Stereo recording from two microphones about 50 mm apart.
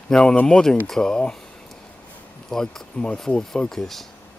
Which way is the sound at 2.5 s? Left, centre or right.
Centre.